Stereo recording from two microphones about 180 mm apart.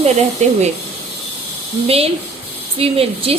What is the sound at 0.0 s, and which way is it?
Speech, 40° right (ahead or behind).